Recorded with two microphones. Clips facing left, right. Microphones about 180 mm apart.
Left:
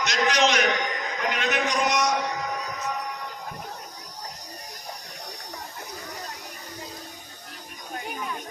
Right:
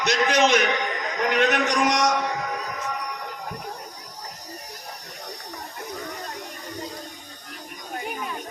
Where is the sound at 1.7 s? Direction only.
90° right.